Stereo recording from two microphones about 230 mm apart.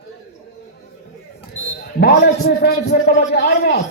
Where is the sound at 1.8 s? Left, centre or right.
Left.